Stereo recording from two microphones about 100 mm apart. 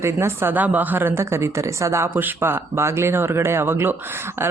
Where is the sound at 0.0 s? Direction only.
25° right (ahead or behind).